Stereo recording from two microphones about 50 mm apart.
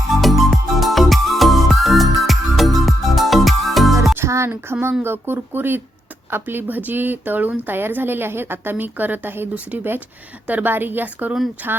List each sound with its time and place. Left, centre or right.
0.2 s music: centre
4.3 s a woman's voice: right
8.7 s a woman's voice: right
9.7 s a woman's voice: right